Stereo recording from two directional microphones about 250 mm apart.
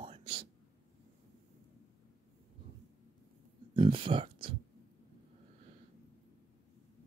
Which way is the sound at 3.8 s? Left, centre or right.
Right.